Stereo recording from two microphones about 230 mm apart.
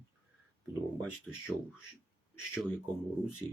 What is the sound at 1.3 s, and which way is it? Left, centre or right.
Speech, centre.